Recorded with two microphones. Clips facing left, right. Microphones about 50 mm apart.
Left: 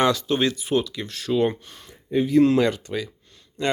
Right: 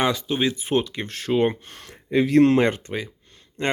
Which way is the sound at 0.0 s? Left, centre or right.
Centre.